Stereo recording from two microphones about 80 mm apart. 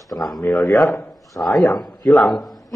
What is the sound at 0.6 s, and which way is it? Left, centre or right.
Speech, left.